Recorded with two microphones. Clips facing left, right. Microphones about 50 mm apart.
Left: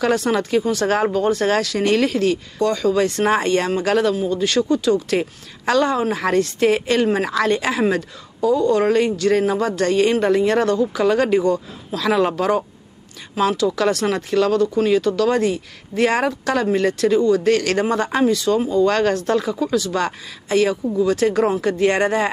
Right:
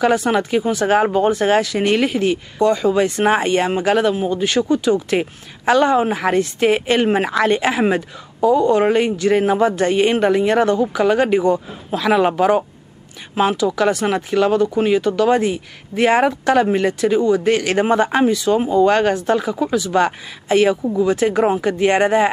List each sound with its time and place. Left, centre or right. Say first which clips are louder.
0.0 s a woman's voice: right 2 dB; right